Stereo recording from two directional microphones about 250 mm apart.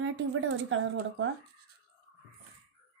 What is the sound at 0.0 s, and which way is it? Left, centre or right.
Speech, right.